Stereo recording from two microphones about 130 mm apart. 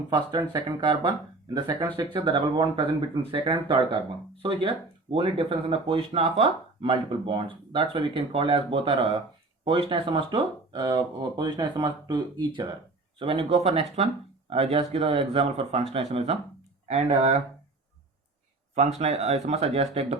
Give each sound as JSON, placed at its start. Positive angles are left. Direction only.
{"t": 0.1, "sound": "speech", "side_deg": -30}
{"t": 5.1, "sound": "speech", "side_deg": -45}
{"t": 18.7, "sound": "speech", "side_deg": -60}